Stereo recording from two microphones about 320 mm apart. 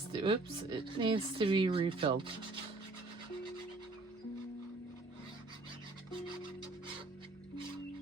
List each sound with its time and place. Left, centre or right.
0.1 s speech: centre